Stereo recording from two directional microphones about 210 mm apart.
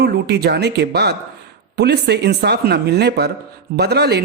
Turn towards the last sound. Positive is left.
turn(degrees=-50)  # may be behind; listen again after turning